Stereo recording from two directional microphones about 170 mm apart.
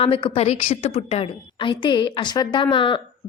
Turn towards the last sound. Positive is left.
turn(degrees=30)  # may be behind; listen again after turning